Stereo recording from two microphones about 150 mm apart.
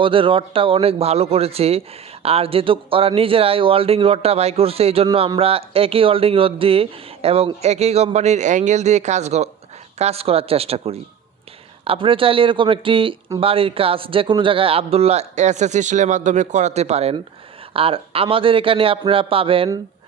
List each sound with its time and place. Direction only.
0.0 s speech: 35° right (ahead or behind)